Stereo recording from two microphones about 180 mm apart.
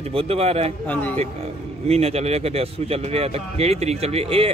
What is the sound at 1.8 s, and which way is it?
A man's voice, 35° right (ahead or behind).